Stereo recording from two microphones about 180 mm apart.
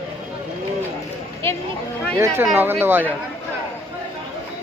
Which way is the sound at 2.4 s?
10° right (ahead or behind).